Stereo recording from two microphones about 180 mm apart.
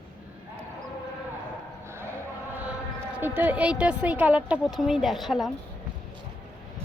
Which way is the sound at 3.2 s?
10° right (ahead or behind).